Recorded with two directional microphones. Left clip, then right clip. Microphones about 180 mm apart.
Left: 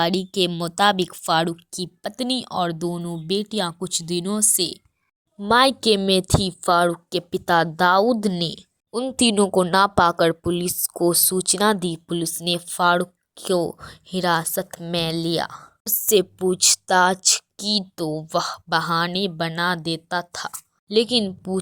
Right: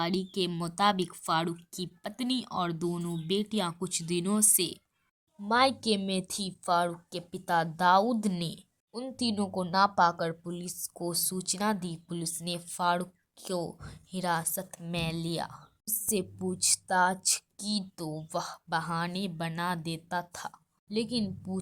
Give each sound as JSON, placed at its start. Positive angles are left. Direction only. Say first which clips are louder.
{"t": 0.0, "sound": "speech", "louder": "left 10 dB", "side_deg": 40}
{"t": 5.4, "sound": "a woman's voice", "louder": "left 9 dB", "side_deg": 45}
{"t": 8.9, "sound": "speech", "louder": "left 13 dB", "side_deg": 45}